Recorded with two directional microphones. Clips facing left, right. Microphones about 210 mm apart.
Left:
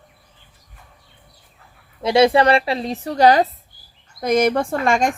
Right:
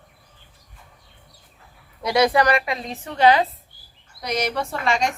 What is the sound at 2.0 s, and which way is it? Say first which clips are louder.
A woman's voice: left 4 dB; 25° left (ahead or behind).